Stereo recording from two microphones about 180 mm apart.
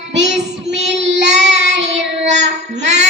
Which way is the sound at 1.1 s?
80° right.